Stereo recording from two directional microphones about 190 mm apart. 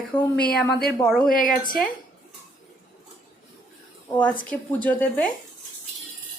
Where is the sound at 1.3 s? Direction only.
45° left (ahead or behind).